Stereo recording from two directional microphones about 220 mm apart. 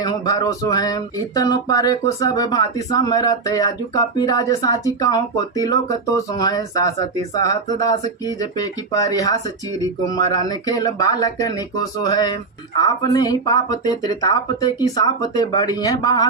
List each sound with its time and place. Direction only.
0.0 s speech: 15° left (ahead or behind)